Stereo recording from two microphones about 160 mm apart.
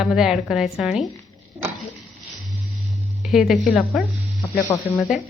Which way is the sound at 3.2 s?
Centre (ahead or behind).